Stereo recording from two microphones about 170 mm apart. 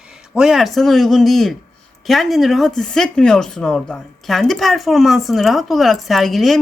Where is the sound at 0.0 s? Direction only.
5° right (ahead or behind).